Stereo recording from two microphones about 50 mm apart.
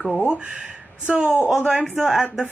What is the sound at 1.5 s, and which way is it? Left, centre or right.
Speech, centre.